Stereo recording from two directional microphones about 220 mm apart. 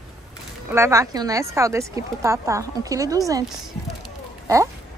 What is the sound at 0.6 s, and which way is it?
Speech, 10° right (ahead or behind).